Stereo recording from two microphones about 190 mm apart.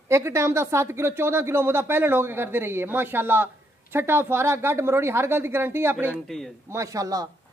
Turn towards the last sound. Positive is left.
turn(degrees=-20)  # may be behind; listen again after turning